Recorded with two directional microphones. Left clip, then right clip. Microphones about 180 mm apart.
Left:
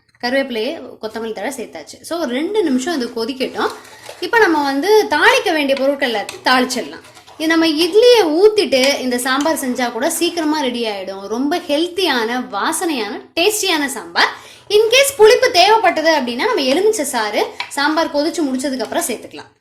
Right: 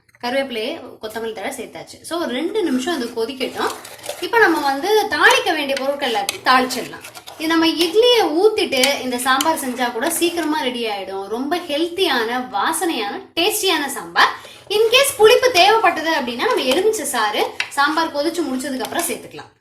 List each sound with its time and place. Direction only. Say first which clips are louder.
0.2 s a woman's voice: left 3 dB; 55° left (ahead or behind)
2.0 s a woman's voice: left 2 dB; 50° left (ahead or behind)